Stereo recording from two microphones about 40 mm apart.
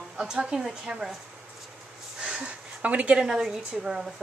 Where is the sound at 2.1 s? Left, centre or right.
Right.